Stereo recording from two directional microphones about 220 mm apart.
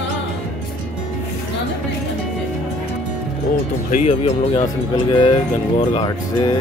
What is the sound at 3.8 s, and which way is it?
Speech, 35° left (ahead or behind).